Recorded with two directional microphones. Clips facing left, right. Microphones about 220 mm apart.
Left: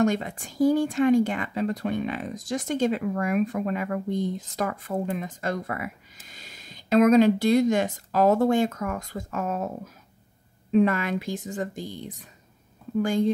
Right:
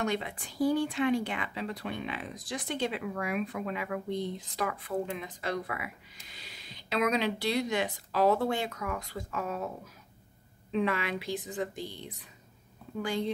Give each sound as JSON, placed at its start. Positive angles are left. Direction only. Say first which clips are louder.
{"t": 0.0, "sound": "speech", "louder": "left 8 dB", "side_deg": 45}
{"t": 10.7, "sound": "speech", "louder": "left 8 dB", "side_deg": 45}